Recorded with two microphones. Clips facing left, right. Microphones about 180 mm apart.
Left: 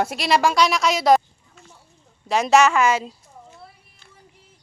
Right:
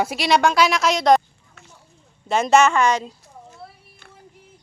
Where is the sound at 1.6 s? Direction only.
70° right (ahead or behind).